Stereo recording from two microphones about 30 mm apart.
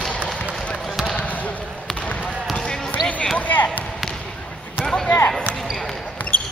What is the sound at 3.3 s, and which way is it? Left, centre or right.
Basketball bounce, left.